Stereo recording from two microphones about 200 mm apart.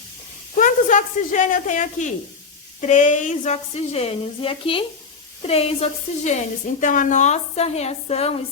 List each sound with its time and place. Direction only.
0.5 s a woman's voice: 40° left (ahead or behind)